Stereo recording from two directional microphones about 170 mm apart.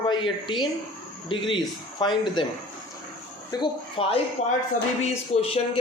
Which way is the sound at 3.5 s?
30° left (ahead or behind).